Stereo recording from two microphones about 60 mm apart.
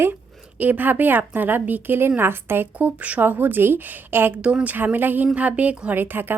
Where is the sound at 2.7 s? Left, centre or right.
Right.